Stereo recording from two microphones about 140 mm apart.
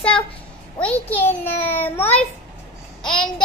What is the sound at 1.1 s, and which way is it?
Child singing, 15° left (ahead or behind).